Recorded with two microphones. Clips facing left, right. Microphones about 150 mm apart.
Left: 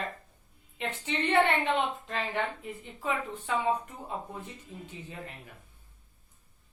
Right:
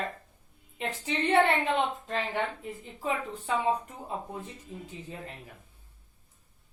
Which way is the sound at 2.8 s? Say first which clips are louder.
Right 1 dB; 35° right (ahead or behind).